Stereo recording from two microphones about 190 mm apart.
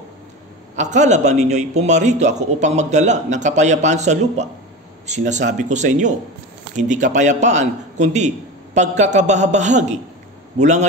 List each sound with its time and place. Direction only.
0.7 s a man's voice: 40° right (ahead or behind)